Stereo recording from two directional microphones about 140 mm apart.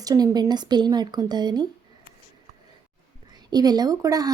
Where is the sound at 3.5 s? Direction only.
30° right (ahead or behind).